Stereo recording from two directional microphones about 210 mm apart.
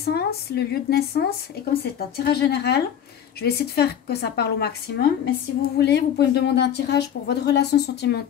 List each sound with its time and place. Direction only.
0.0 s speech: 50° left (ahead or behind)